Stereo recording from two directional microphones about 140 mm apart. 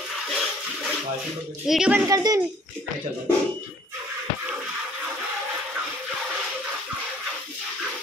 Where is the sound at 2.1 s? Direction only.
25° right (ahead or behind).